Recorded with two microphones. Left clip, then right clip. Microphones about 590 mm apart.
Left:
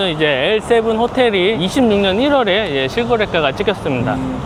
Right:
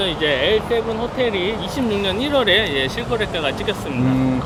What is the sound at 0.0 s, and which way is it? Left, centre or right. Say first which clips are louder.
Speech: left 3 dB; left.